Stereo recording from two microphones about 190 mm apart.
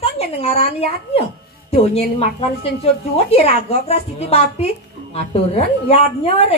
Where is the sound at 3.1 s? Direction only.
30° left (ahead or behind).